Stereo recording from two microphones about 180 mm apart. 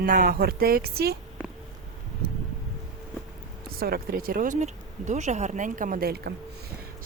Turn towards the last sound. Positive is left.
turn(degrees=-60)  # may be behind; listen again after turning